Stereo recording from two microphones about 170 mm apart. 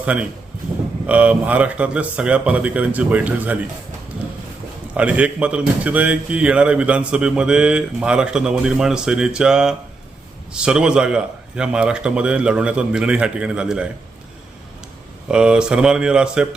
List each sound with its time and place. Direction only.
0.0 s a man's voice: 5° right (ahead or behind)
4.9 s a man's voice: 10° right (ahead or behind)
15.3 s a man's voice: 5° right (ahead or behind)